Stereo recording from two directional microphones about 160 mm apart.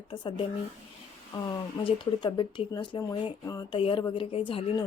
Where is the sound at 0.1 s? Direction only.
30° left (ahead or behind).